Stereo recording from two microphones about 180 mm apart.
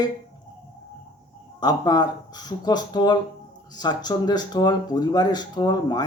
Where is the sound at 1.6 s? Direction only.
20° left (ahead or behind).